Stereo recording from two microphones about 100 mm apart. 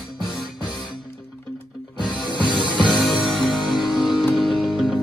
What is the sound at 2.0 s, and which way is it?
Music, 50° left (ahead or behind).